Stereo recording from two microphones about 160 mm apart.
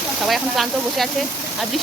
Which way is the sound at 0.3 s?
Centre (ahead or behind).